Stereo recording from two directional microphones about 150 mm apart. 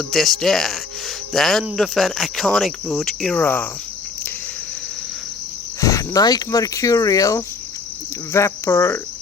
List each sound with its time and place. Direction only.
0.1 s speech: centre (ahead or behind)
5.8 s speech: 20° left (ahead or behind)
8.3 s cricket: 20° left (ahead or behind)